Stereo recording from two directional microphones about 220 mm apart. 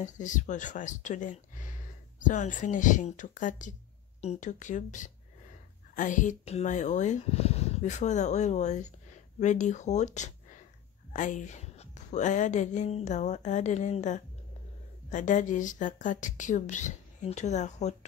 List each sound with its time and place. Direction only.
0.0 s speech: 35° left (ahead or behind)